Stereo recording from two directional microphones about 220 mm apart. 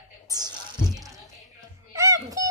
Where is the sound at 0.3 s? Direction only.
15° right (ahead or behind).